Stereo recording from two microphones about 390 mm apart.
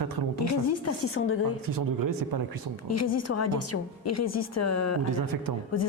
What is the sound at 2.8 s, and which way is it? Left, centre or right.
A woman's voice, left.